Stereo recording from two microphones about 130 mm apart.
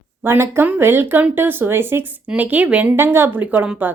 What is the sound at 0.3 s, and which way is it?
Speech, 20° right (ahead or behind).